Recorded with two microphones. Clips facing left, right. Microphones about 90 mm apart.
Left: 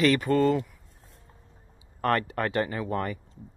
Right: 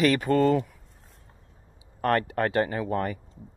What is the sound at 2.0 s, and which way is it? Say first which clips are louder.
Speech: right 2 dB; 20° right (ahead or behind).